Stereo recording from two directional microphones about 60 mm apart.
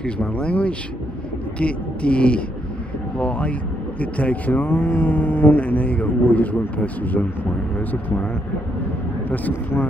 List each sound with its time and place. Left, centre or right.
0.0 s speech: centre
9.5 s speech: left